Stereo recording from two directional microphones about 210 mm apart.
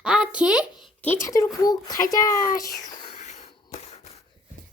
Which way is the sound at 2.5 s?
15° left (ahead or behind).